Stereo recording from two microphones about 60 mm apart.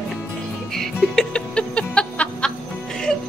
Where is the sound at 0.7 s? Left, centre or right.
Centre.